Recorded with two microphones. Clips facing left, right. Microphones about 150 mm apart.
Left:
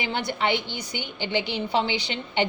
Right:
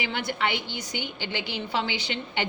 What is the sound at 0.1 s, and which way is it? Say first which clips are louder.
Speech: left 5 dB; 25° left (ahead or behind).